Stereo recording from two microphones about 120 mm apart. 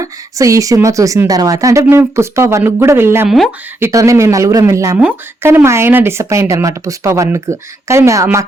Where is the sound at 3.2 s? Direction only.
Centre (ahead or behind).